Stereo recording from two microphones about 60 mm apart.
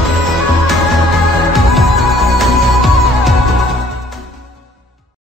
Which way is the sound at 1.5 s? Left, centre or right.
Centre.